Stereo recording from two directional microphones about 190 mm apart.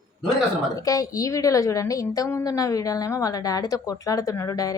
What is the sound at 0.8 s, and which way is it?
A woman's voice, 20° left (ahead or behind).